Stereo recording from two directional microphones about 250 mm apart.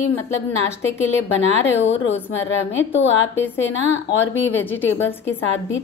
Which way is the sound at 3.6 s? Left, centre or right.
Left.